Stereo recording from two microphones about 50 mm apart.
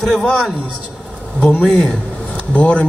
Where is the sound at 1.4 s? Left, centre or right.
Left.